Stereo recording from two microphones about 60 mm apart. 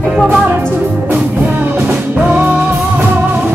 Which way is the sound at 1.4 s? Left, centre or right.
Right.